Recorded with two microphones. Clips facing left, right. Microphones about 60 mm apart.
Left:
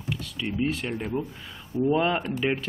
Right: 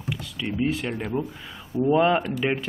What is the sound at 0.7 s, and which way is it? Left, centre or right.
Speech, centre.